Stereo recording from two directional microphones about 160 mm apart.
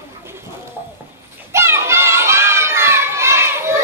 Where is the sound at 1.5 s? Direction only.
15° right (ahead or behind).